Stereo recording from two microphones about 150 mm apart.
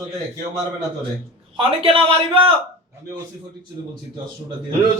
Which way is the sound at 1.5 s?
40° right (ahead or behind).